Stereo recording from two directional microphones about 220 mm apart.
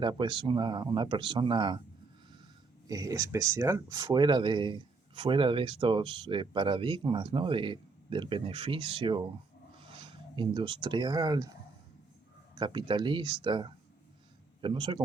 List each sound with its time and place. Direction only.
0.0 s speech: 20° right (ahead or behind)
2.8 s speech: 15° right (ahead or behind)
12.5 s speech: 20° right (ahead or behind)